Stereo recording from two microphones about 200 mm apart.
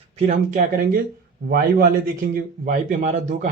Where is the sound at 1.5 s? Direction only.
45° right (ahead or behind).